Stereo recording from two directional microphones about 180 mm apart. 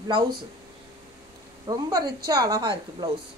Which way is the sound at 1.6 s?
25° right (ahead or behind).